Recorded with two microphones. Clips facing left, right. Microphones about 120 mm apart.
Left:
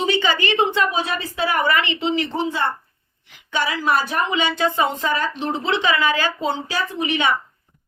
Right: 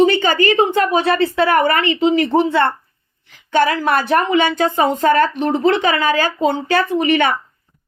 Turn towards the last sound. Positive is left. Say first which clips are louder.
# right 6 dB
turn(degrees=-55)  # may be behind; listen again after turning